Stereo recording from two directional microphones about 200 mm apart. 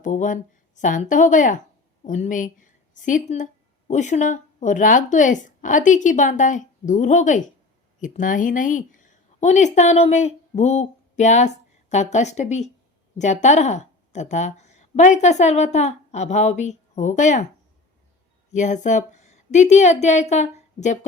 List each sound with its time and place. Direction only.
0.0 s a woman's voice: 40° left (ahead or behind)
18.5 s a woman's voice: 35° left (ahead or behind)